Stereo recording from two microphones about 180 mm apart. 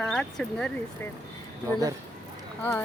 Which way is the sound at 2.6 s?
10° left (ahead or behind).